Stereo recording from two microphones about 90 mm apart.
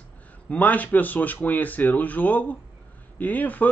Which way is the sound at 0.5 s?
20° left (ahead or behind).